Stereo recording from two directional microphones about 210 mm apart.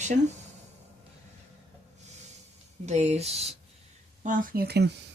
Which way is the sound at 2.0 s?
30° right (ahead or behind).